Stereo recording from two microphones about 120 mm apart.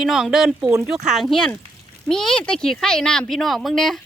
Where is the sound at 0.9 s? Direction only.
Centre (ahead or behind).